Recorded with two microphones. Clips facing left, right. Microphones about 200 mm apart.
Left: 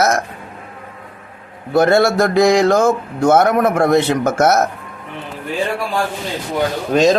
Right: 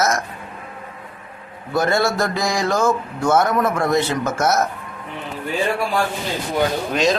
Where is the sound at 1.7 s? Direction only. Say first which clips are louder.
Left 6 dB; 60° left (ahead or behind).